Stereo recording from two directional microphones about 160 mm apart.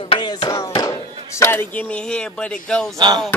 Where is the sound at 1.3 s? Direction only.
15° left (ahead or behind).